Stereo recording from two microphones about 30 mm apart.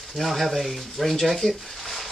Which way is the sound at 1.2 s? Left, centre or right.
Centre.